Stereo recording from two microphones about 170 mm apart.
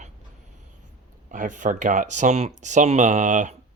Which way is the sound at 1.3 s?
50° right (ahead or behind).